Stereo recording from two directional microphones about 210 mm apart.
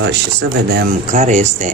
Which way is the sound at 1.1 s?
35° right (ahead or behind).